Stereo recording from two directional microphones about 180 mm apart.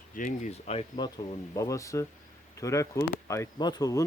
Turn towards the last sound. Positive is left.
turn(degrees=20)  # may be behind; listen again after turning